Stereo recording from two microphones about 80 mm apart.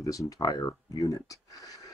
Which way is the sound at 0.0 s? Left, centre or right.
Left.